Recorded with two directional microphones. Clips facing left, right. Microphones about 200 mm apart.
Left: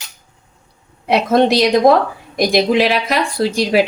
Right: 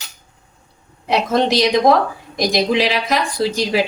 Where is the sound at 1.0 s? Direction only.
55° left (ahead or behind).